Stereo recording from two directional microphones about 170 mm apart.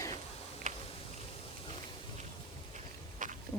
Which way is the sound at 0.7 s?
50° right (ahead or behind).